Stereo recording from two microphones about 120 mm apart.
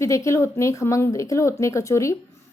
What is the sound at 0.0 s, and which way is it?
A woman's voice, 25° left (ahead or behind).